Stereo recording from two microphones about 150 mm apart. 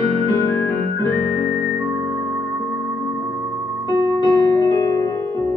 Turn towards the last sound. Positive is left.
turn(degrees=25)  # may be behind; listen again after turning